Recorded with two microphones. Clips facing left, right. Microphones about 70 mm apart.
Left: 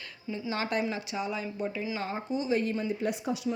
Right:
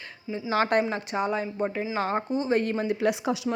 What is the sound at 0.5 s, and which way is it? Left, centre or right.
A woman's voice, right.